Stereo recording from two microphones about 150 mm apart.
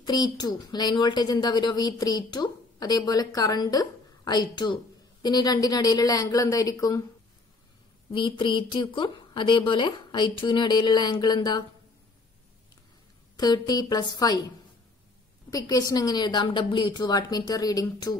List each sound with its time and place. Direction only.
0.0 s a woman's voice: 25° left (ahead or behind)
8.1 s speech: 35° left (ahead or behind)
13.4 s a woman's voice: 25° left (ahead or behind)
15.5 s a woman's voice: 25° left (ahead or behind)